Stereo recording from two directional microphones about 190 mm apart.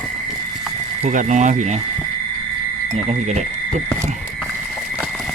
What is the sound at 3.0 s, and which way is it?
Speech, 35° right (ahead or behind).